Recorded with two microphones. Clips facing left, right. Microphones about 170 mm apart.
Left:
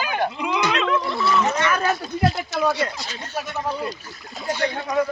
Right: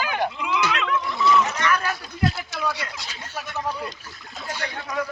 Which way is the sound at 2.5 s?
45° left (ahead or behind).